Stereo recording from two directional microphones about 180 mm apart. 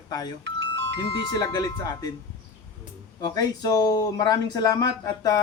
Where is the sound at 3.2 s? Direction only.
20° left (ahead or behind).